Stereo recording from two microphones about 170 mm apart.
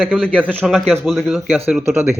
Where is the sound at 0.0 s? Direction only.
5° left (ahead or behind).